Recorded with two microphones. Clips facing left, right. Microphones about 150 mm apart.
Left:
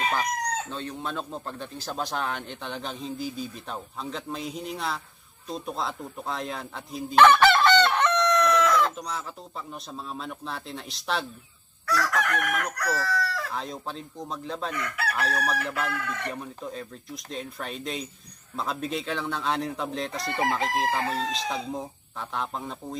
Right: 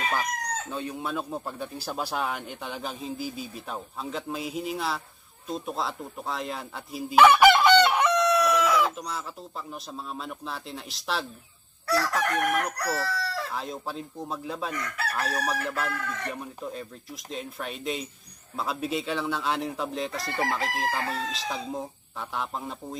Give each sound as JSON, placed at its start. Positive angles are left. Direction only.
{"t": 0.1, "sound": "speech", "side_deg": -10}
{"t": 11.9, "sound": "chicken", "side_deg": -30}
{"t": 13.6, "sound": "speech", "side_deg": -5}